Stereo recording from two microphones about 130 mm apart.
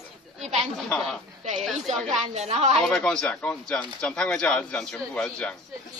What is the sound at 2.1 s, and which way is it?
Speech, 55° right (ahead or behind).